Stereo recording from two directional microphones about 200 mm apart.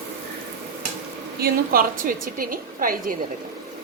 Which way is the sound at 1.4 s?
45° right (ahead or behind).